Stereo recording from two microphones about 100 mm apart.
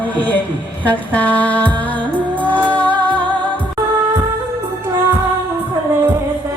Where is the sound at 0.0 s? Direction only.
15° left (ahead or behind).